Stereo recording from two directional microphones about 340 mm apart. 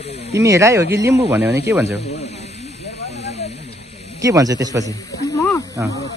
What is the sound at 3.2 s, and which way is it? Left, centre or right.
Snake, centre.